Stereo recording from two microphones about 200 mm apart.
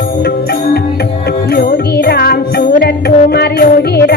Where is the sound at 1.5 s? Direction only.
50° left (ahead or behind).